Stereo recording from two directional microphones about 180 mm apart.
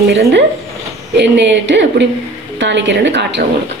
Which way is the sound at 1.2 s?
75° right (ahead or behind).